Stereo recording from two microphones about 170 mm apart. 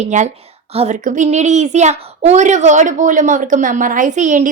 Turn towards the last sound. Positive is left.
turn(degrees=-45)  # may be behind; listen again after turning